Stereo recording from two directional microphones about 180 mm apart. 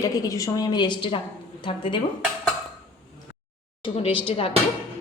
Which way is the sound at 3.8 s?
30° left (ahead or behind).